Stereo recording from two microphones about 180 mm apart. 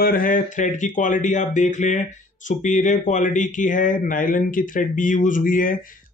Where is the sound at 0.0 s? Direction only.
50° left (ahead or behind).